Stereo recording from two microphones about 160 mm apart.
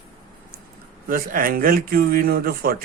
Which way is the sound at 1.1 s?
65° right (ahead or behind).